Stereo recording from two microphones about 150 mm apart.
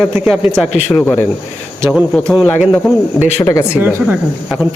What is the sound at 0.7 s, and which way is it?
Speech, 50° left (ahead or behind).